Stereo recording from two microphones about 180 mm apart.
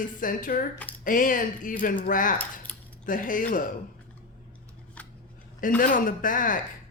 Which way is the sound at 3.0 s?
50° left (ahead or behind).